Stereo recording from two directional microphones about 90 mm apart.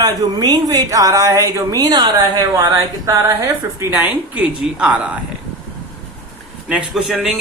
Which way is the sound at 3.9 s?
20° right (ahead or behind).